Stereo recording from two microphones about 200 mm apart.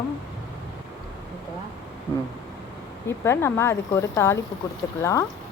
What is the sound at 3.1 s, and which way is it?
Speech, 15° left (ahead or behind).